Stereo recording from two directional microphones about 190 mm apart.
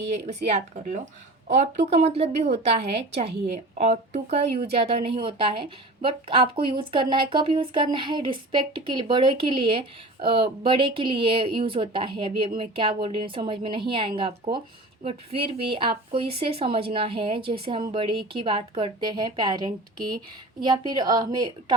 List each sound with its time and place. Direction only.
0.4 s a woman's voice: 35° right (ahead or behind)